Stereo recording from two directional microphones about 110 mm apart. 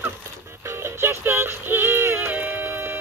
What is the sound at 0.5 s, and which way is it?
Synthetic singing, 25° right (ahead or behind).